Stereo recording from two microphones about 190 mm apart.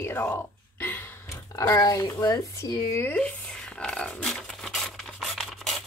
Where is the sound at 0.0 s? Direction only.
10° left (ahead or behind).